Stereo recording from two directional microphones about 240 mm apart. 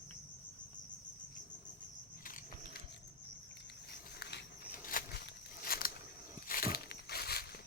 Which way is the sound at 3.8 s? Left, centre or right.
Left.